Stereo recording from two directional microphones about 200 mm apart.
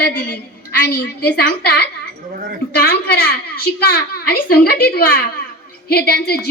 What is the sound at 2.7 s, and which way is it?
A woman's voice, 50° left (ahead or behind).